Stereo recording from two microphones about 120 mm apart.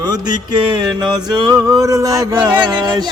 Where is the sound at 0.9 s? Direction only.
35° right (ahead or behind).